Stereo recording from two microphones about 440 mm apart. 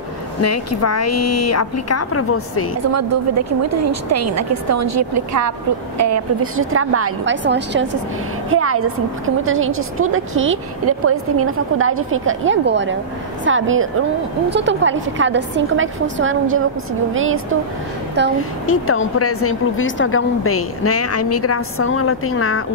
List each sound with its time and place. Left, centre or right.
0.4 s a woman's voice: left
2.8 s a woman's voice: right
18.7 s a woman's voice: left